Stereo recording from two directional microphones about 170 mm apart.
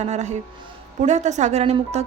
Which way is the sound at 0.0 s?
40° right (ahead or behind).